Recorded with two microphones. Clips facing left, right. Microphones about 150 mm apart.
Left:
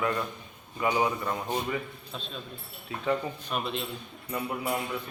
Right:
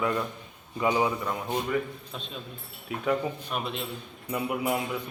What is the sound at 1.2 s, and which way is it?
Speech, 5° left (ahead or behind).